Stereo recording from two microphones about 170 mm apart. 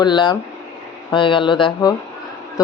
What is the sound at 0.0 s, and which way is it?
A man's voice, 25° left (ahead or behind).